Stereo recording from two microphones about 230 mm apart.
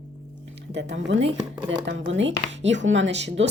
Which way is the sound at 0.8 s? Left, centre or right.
Right.